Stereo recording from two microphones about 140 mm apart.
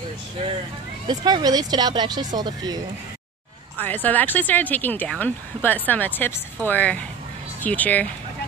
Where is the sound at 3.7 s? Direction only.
15° left (ahead or behind).